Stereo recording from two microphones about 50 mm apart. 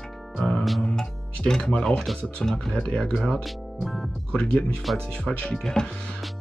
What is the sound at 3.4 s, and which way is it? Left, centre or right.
Speech, centre.